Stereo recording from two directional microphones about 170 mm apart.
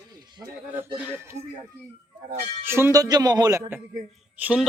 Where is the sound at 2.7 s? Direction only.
15° right (ahead or behind).